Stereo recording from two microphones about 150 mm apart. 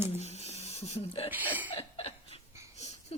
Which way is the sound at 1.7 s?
40° left (ahead or behind).